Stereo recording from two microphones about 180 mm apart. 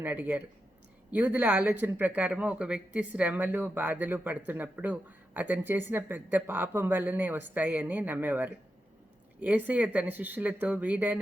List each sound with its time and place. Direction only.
0.0 s speech: 10° right (ahead or behind)